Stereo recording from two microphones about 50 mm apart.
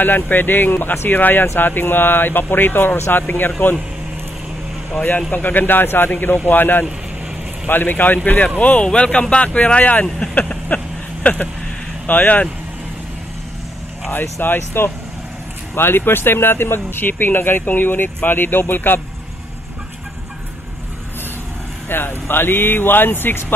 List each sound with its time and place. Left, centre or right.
0.0 s speech: left
5.3 s speech: left
10.0 s speech: centre
10.3 s vehicle: left
11.3 s speech: left
14.4 s speech: left
21.8 s speech: left